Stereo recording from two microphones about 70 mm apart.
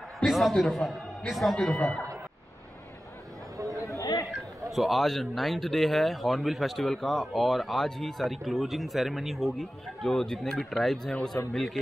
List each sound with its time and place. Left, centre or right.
0.3 s speech: centre
3.8 s a sound: left
4.6 s speech: centre